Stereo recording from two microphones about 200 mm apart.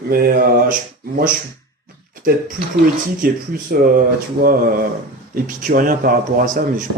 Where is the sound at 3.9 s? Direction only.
45° right (ahead or behind).